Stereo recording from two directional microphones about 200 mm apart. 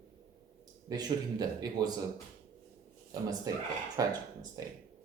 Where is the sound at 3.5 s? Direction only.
15° right (ahead or behind).